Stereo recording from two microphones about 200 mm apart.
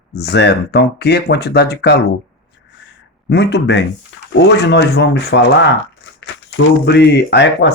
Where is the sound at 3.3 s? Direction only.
60° left (ahead or behind).